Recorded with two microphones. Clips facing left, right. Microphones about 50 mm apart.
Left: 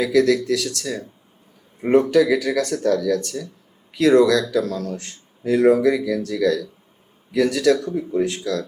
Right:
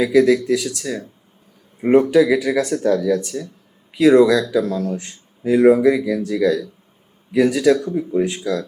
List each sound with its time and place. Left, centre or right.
0.0 s speech: centre